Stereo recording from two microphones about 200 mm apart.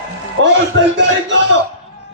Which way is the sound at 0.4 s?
65° right (ahead or behind).